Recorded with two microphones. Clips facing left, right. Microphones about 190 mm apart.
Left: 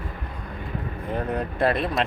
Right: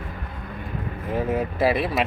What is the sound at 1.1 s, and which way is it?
Speech, 5° right (ahead or behind).